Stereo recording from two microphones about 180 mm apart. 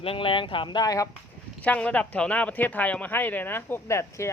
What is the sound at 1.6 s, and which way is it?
Speech, 5° left (ahead or behind).